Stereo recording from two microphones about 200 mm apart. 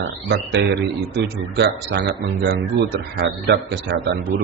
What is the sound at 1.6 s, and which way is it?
A man's voice, 55° right (ahead or behind).